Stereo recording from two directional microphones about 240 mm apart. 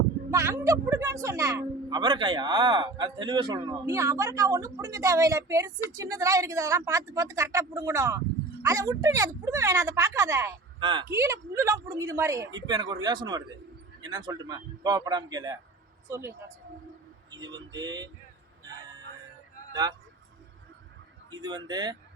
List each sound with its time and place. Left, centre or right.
0.3 s a man's voice: centre
17.3 s a man's voice: centre
21.3 s a man's voice: centre